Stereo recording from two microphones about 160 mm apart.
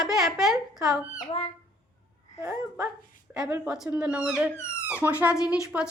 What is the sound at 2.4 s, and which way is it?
Speech, 10° right (ahead or behind).